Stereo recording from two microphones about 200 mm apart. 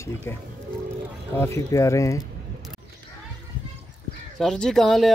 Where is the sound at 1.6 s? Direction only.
15° left (ahead or behind).